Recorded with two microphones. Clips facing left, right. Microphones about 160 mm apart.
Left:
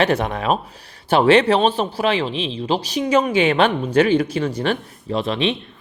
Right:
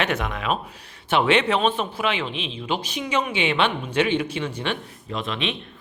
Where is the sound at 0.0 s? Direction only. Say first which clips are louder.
Left 6 dB; 35° left (ahead or behind).